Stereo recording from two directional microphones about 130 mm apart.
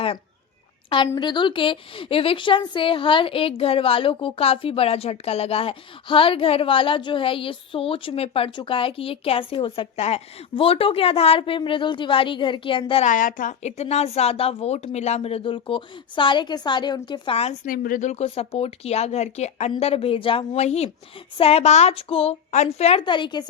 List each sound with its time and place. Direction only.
1.1 s a woman's voice: 35° left (ahead or behind)
13.1 s a woman's voice: 90° left; by 17.3 s 35° left (ahead or behind)
17.3 s speech: 60° left (ahead or behind)
19.8 s a woman's voice: 50° left (ahead or behind)
20.5 s a woman's voice: 55° left (ahead or behind)
23.0 s speech: 40° left (ahead or behind)